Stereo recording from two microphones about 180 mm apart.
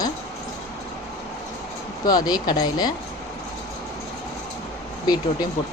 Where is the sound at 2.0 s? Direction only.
20° left (ahead or behind).